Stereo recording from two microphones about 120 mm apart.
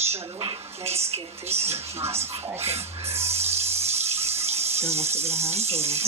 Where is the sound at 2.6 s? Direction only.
60° right (ahead or behind).